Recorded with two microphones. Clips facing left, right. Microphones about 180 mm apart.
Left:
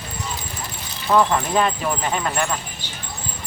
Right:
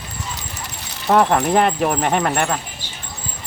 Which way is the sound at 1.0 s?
70° right (ahead or behind).